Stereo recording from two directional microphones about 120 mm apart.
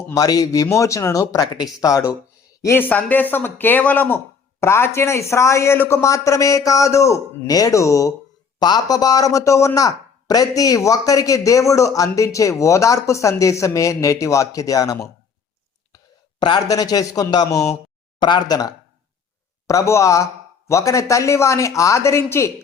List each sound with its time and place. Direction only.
0.1 s a man's voice: 30° left (ahead or behind)
16.4 s a man's voice: 35° left (ahead or behind)
18.2 s a man's voice: 40° left (ahead or behind); by 22.5 s 25° left (ahead or behind)